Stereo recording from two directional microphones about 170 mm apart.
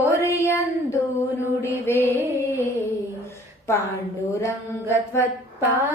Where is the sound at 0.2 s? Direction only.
15° left (ahead or behind).